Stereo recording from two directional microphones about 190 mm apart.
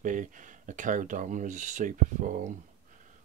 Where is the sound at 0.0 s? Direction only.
40° right (ahead or behind).